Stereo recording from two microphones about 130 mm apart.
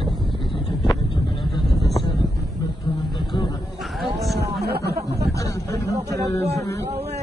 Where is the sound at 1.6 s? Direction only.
Centre (ahead or behind).